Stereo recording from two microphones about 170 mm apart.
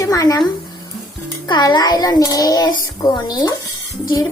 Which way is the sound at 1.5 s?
25° left (ahead or behind).